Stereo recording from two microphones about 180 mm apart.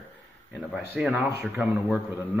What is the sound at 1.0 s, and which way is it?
A man's voice, 5° right (ahead or behind).